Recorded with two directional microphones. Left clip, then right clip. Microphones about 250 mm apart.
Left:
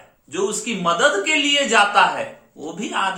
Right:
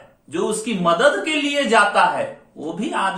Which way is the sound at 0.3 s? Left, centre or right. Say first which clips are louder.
Right 1 dB; centre.